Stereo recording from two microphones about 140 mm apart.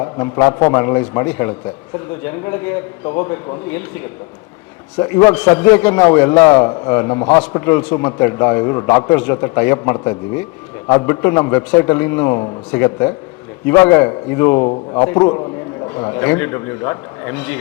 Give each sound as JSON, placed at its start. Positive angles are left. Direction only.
{"t": 0.0, "sound": "a man's voice", "side_deg": 20}